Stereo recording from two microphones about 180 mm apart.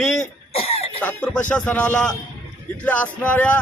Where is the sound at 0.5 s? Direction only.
35° left (ahead or behind).